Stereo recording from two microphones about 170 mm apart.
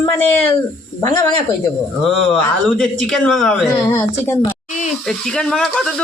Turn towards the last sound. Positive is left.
turn(degrees=5)  # may be behind; listen again after turning